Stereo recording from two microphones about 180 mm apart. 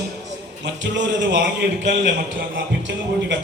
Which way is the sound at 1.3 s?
80° right.